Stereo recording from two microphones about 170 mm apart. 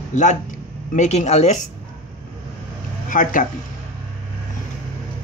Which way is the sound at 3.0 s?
50° left (ahead or behind).